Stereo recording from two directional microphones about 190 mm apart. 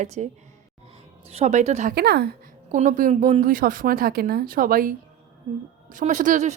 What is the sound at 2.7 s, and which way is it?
A woman's voice, 45° right (ahead or behind).